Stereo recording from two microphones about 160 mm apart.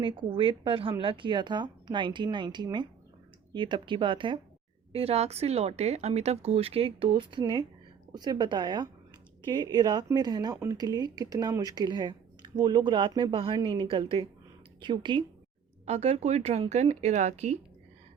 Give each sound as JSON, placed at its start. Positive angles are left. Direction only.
{"t": 0.0, "sound": "speech", "side_deg": -30}
{"t": 15.9, "sound": "speech", "side_deg": -45}